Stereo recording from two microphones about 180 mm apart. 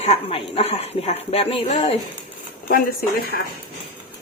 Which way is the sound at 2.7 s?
50° left (ahead or behind).